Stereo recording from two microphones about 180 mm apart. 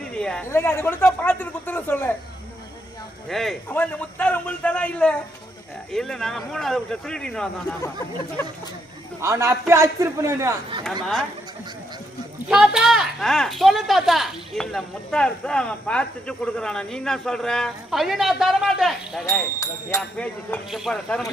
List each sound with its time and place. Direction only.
0.2 s speech: 5° left (ahead or behind)
3.2 s speech: centre (ahead or behind)
9.2 s a man's voice: 15° right (ahead or behind)
10.8 s speech: centre (ahead or behind)
12.5 s speech: 5° right (ahead or behind)